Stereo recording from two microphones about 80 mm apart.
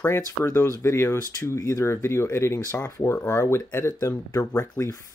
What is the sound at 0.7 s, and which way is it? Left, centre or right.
Speech, left.